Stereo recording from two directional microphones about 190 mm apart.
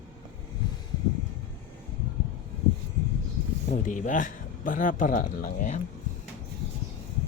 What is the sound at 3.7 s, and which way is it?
Speech, 40° left (ahead or behind).